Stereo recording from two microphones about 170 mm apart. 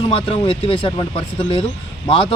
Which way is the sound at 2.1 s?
30° left (ahead or behind).